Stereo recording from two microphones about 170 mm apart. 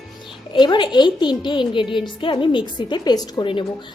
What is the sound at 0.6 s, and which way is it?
A woman's voice, 25° left (ahead or behind).